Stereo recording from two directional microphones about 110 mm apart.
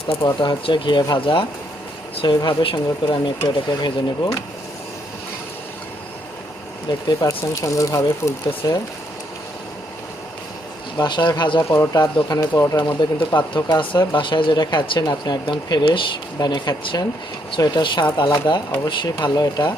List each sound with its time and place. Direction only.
0.3 s speech: 45° left (ahead or behind)
7.1 s speech: 35° left (ahead or behind)
10.9 s speech: 40° left (ahead or behind)
15.8 s speech: 55° left (ahead or behind)
16.4 s speech: 40° left (ahead or behind)